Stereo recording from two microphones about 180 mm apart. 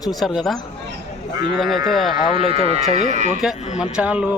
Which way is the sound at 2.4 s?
30° right (ahead or behind).